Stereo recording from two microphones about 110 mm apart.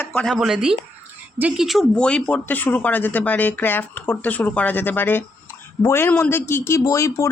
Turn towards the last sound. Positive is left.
turn(degrees=25)  # may be behind; listen again after turning